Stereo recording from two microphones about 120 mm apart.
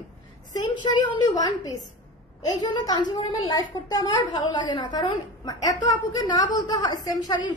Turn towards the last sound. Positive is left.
turn(degrees=35)  # may be behind; listen again after turning